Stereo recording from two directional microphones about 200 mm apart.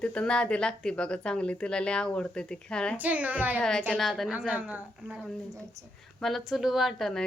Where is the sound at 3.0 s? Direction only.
10° right (ahead or behind).